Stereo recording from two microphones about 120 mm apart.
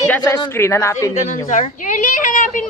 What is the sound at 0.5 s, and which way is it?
Speech, 20° left (ahead or behind).